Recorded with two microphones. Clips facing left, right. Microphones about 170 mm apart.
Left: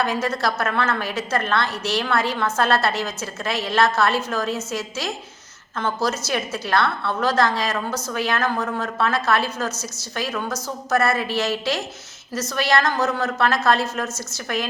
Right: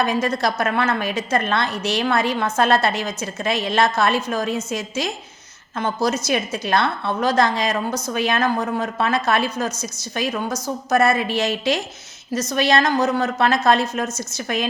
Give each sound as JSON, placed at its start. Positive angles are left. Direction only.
{"t": 0.0, "sound": "a woman's voice", "side_deg": -15}